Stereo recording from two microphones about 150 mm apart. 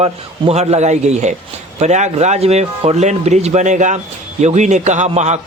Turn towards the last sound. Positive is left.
turn(degrees=-50)  # may be behind; listen again after turning